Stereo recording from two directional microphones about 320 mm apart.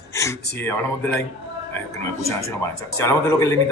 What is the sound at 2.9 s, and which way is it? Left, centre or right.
Speech, centre.